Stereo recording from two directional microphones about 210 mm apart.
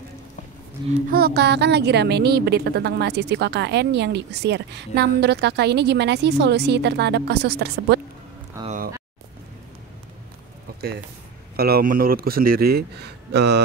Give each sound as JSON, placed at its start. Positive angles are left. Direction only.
{"t": 0.8, "sound": "speech", "side_deg": -20}
{"t": 1.1, "sound": "a woman's voice", "side_deg": -50}
{"t": 8.6, "sound": "speech", "side_deg": -40}
{"t": 10.7, "sound": "a sound", "side_deg": -45}
{"t": 11.5, "sound": "a woman's voice", "side_deg": -45}